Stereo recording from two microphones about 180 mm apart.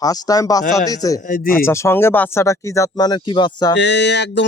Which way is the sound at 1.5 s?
15° left (ahead or behind).